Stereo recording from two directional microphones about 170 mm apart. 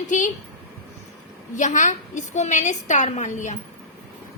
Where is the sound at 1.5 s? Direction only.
50° left (ahead or behind).